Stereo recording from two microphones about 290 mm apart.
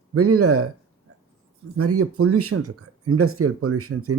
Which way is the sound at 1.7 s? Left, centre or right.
Right.